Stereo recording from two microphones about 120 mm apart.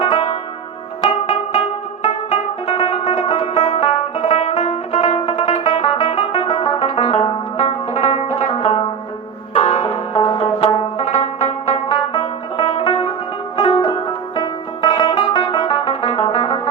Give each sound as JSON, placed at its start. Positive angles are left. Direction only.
{"t": 0.0, "sound": "music", "side_deg": 50}
{"t": 2.0, "sound": "music", "side_deg": 65}
{"t": 5.5, "sound": "music", "side_deg": 50}
{"t": 6.7, "sound": "music", "side_deg": 55}